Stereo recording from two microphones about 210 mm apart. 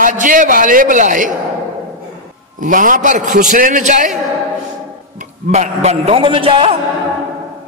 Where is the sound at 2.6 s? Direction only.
40° right (ahead or behind).